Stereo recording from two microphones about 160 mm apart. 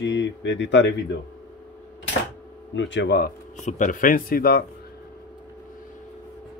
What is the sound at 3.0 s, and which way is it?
Speech, 85° left.